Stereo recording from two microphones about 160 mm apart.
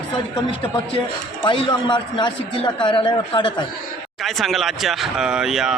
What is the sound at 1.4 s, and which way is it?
A man's voice, 30° left (ahead or behind).